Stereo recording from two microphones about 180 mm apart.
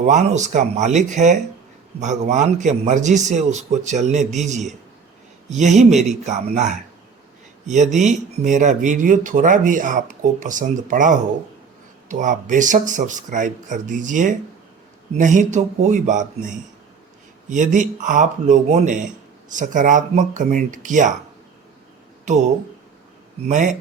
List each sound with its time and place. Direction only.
0.0 s a man's voice: 40° right (ahead or behind)
23.5 s speech: 45° right (ahead or behind)